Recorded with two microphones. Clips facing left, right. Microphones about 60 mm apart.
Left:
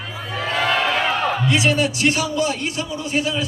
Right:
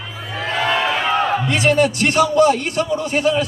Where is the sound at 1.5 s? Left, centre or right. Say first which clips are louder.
Right 3 dB; right.